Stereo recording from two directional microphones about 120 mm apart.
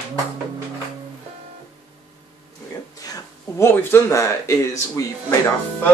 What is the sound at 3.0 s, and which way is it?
Speech, 25° left (ahead or behind).